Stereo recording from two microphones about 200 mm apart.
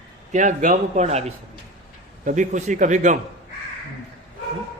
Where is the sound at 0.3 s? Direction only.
40° right (ahead or behind).